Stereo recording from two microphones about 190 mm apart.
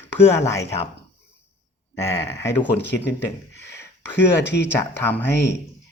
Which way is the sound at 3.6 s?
60° left (ahead or behind).